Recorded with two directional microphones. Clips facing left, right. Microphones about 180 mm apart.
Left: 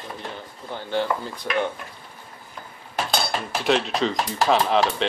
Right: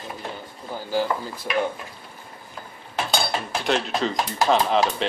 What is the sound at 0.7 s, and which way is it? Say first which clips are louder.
Speech: even; 5° right (ahead or behind).